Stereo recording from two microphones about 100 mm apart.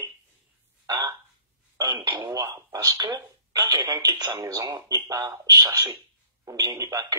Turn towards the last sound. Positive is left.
turn(degrees=-35)  # may be behind; listen again after turning